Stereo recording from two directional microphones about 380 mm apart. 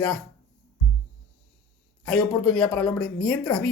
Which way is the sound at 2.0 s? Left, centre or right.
Centre.